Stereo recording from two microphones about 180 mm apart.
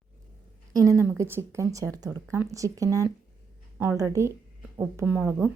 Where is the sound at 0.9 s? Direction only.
15° right (ahead or behind).